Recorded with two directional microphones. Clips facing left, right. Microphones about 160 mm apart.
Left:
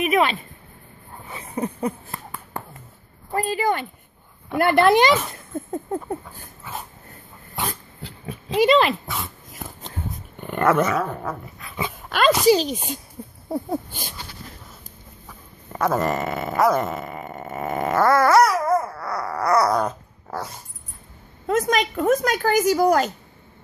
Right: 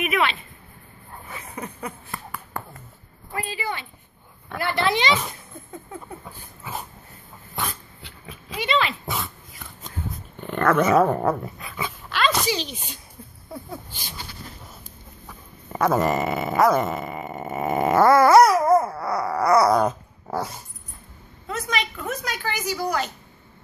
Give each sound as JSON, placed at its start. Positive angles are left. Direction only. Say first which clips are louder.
{"t": 0.0, "sound": "speech", "louder": "left 4 dB", "side_deg": 40}
{"t": 1.4, "sound": "a sound", "louder": "left 9 dB", "side_deg": 30}
{"t": 3.3, "sound": "speech", "louder": "left 8 dB", "side_deg": 45}
{"t": 7.6, "sound": "dog", "louder": "left 3 dB", "side_deg": 35}
{"t": 9.6, "sound": "a sound", "louder": "left 8 dB", "side_deg": 40}
{"t": 10.4, "sound": "dog", "louder": "left 1 dB", "side_deg": 10}
{"t": 11.0, "sound": "speech", "louder": "right 7 dB", "side_deg": -50}
{"t": 12.4, "sound": "speech", "louder": "left 11 dB", "side_deg": 40}
{"t": 15.2, "sound": "dog", "louder": "right 1 dB", "side_deg": -5}
{"t": 21.5, "sound": "speech", "louder": "left 8 dB", "side_deg": 45}